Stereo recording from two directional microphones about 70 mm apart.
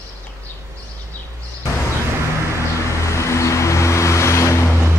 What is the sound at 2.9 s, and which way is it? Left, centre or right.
Vehicle, left.